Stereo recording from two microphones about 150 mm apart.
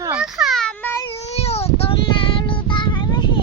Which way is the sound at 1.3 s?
45° left (ahead or behind).